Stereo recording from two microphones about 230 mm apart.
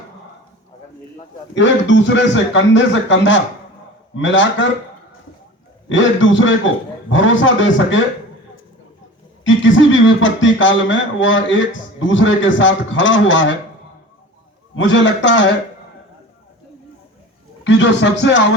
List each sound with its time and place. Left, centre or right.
1.5 s a man's voice: left
5.9 s a man's voice: left
9.4 s a man's voice: left
14.8 s a man's voice: left
17.6 s a man's voice: left